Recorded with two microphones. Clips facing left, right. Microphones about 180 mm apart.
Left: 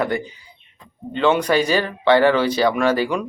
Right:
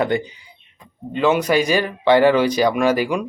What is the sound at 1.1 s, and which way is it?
Speech, 5° right (ahead or behind).